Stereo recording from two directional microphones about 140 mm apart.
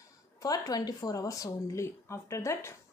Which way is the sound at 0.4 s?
25° left (ahead or behind).